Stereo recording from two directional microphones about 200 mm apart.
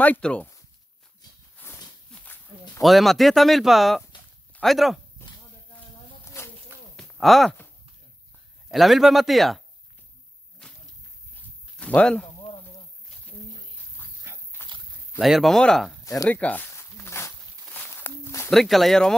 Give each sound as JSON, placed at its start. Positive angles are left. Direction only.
{"t": 0.0, "sound": "speech", "side_deg": 5}
{"t": 1.6, "sound": "horse", "side_deg": 10}
{"t": 2.8, "sound": "speech", "side_deg": 0}
{"t": 7.0, "sound": "a sound", "side_deg": 0}
{"t": 8.6, "sound": "speech", "side_deg": 0}
{"t": 11.8, "sound": "speech", "side_deg": 5}
{"t": 14.3, "sound": "dog", "side_deg": -10}
{"t": 15.1, "sound": "speech", "side_deg": 0}
{"t": 16.0, "sound": "a sound", "side_deg": 15}
{"t": 16.3, "sound": "snake", "side_deg": 5}
{"t": 17.8, "sound": "walk", "side_deg": 10}
{"t": 18.5, "sound": "speech", "side_deg": 0}